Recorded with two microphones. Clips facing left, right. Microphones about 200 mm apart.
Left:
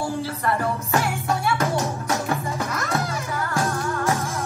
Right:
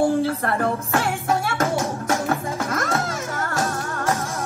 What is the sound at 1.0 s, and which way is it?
Music, 50° right (ahead or behind).